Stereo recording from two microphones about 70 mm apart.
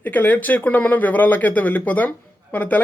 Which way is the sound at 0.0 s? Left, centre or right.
Left.